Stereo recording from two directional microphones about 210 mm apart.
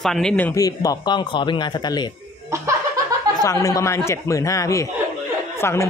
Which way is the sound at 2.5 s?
15° right (ahead or behind).